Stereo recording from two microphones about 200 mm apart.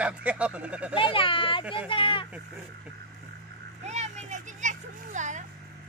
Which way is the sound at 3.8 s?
35° right (ahead or behind).